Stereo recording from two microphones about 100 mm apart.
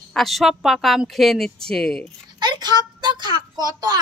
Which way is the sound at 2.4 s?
45° right (ahead or behind).